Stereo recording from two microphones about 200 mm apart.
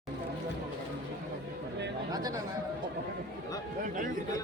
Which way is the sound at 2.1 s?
20° right (ahead or behind).